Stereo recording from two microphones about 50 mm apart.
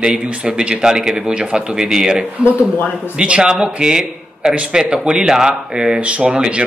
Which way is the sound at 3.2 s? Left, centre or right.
Centre.